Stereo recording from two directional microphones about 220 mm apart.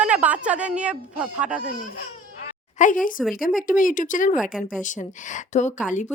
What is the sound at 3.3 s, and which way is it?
Speech, 40° left (ahead or behind).